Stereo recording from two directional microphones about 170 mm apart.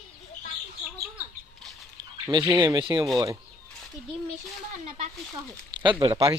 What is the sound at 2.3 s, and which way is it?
Speech, 25° right (ahead or behind).